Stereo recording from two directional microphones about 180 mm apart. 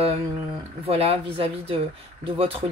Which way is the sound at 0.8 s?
35° right (ahead or behind).